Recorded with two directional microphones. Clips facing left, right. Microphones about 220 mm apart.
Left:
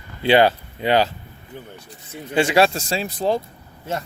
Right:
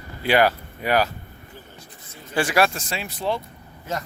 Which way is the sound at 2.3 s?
25° left (ahead or behind).